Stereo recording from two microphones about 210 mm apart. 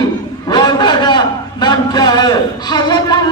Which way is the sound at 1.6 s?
20° left (ahead or behind).